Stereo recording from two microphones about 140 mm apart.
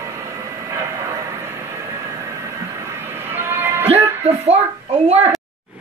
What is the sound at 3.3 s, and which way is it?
Cat, 15° right (ahead or behind).